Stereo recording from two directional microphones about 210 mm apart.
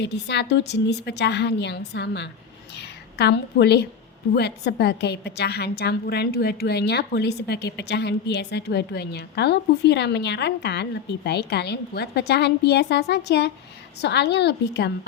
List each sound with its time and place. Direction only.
0.0 s a woman's voice: 55° left (ahead or behind)